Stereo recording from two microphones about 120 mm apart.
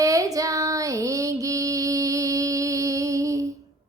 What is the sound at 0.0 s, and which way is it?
Female singing, 30° right (ahead or behind).